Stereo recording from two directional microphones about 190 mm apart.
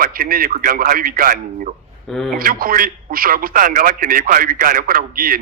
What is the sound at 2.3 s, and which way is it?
A man's voice, 50° right (ahead or behind).